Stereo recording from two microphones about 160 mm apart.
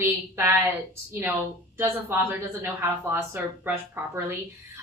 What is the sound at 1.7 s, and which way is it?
A woman's voice, 15° right (ahead or behind).